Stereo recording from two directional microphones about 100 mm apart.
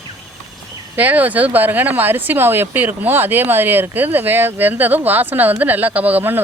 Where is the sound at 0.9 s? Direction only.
15° right (ahead or behind).